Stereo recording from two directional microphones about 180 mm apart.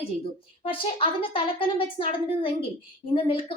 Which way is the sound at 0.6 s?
30° left (ahead or behind).